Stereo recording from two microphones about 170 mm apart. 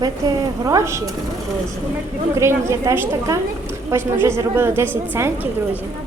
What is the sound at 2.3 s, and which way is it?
A woman's voice, 15° right (ahead or behind).